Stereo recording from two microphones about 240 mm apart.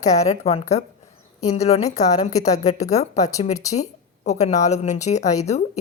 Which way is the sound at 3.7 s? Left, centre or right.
Left.